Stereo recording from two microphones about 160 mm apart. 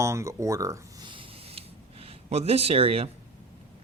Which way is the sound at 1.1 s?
35° right (ahead or behind).